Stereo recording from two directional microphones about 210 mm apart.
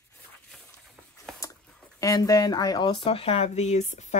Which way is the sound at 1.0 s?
5° right (ahead or behind).